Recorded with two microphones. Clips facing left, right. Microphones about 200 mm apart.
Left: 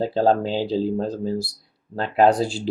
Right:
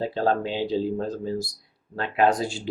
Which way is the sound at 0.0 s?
35° left (ahead or behind).